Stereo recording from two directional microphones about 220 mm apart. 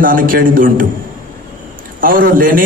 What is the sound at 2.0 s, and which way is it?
Speech, 40° right (ahead or behind).